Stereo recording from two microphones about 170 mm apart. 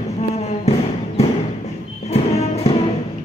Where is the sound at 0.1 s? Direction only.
40° left (ahead or behind).